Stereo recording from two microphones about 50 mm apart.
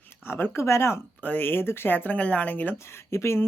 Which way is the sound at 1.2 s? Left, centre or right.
Left.